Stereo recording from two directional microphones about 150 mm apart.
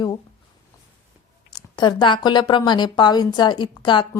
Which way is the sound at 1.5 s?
30° left (ahead or behind).